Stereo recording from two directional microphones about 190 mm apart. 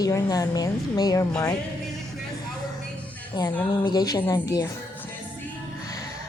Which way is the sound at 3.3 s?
20° left (ahead or behind).